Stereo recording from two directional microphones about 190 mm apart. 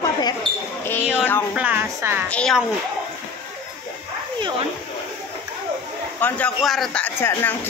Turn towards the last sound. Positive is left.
turn(degrees=10)  # may be behind; listen again after turning